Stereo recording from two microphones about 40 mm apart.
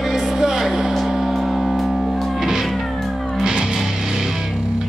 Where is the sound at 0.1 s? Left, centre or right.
Centre.